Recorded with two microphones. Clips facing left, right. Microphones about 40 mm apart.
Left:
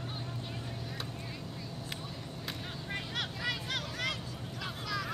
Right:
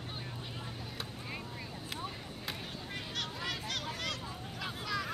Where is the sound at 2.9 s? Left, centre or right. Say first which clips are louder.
Left 3 dB; centre.